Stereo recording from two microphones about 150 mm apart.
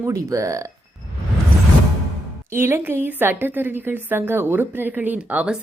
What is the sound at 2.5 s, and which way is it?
A woman's voice, 15° right (ahead or behind).